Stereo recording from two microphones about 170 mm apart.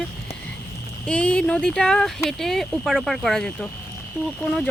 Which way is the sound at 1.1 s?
5° left (ahead or behind).